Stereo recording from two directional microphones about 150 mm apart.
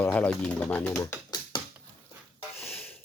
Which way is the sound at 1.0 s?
20° left (ahead or behind).